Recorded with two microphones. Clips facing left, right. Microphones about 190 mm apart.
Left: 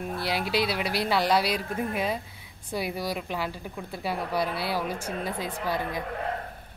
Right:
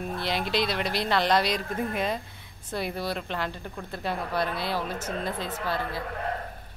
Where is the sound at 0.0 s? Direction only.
10° left (ahead or behind).